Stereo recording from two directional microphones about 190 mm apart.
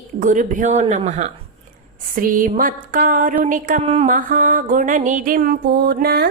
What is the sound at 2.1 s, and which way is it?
Speech, 45° right (ahead or behind).